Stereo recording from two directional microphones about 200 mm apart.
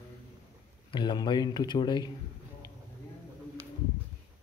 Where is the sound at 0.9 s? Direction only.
20° left (ahead or behind).